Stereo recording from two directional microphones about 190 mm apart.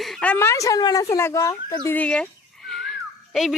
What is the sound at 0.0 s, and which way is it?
A woman's voice, 5° left (ahead or behind).